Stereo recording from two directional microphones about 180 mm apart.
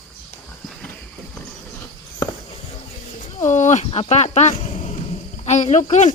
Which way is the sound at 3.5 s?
40° left (ahead or behind).